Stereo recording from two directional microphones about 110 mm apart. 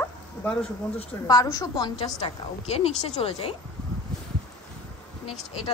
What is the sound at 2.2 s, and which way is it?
A woman's voice, 65° left (ahead or behind).